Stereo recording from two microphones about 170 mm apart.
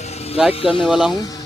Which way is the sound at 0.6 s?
30° left (ahead or behind).